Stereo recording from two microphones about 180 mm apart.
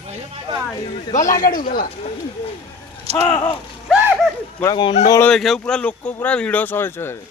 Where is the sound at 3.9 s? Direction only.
5° right (ahead or behind).